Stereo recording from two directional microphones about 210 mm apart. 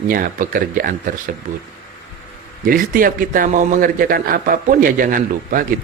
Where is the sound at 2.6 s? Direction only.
40° right (ahead or behind).